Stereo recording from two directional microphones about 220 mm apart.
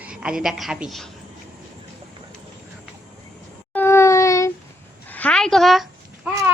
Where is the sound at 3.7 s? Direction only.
10° left (ahead or behind).